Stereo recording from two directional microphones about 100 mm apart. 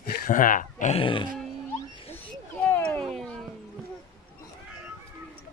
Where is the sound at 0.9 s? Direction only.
65° left (ahead or behind).